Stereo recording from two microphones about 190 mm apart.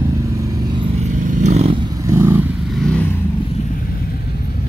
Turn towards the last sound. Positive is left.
turn(degrees=5)  # may be behind; listen again after turning